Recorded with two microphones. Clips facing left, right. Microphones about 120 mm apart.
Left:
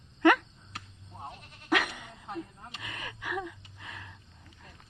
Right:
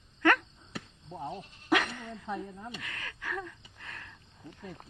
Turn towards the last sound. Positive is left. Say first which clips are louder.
# left 1 dB
turn(degrees=10)  # may be behind; listen again after turning